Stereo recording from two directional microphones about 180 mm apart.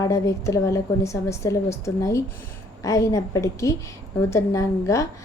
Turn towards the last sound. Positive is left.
turn(degrees=15)  # may be behind; listen again after turning